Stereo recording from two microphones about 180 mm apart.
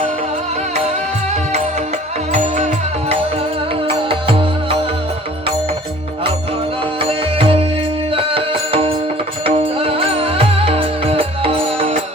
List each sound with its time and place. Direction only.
0.9 s music: 35° right (ahead or behind)
7.0 s music: 30° right (ahead or behind)